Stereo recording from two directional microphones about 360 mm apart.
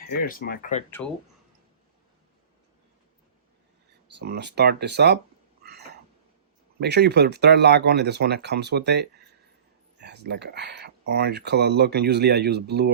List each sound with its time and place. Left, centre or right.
0.1 s speech: left
0.9 s speech: centre
4.2 s speech: right
6.7 s speech: right